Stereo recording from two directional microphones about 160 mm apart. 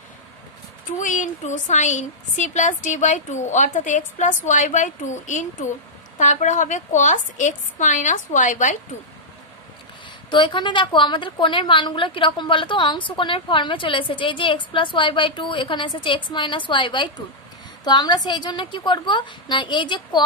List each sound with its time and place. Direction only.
0.9 s a woman's voice: 55° left (ahead or behind)
10.3 s a woman's voice: 30° left (ahead or behind)